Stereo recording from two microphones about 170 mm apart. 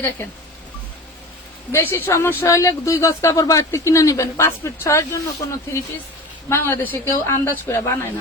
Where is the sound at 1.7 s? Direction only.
15° left (ahead or behind).